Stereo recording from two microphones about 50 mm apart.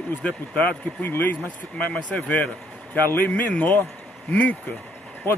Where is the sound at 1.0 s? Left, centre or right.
Left.